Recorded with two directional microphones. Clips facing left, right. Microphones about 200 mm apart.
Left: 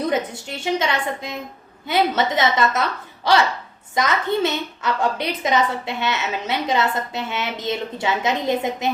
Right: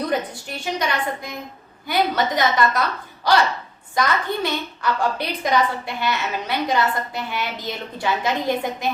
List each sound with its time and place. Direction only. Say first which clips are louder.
0.0 s a woman's voice: left 2 dB; 25° left (ahead or behind)